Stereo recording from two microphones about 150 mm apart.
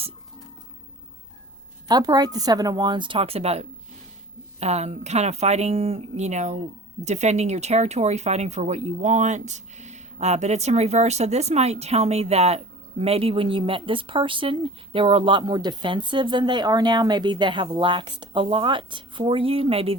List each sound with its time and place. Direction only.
1.9 s speech: 25° right (ahead or behind)